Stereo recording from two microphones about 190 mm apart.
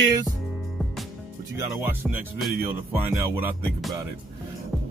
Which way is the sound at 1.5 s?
10° right (ahead or behind).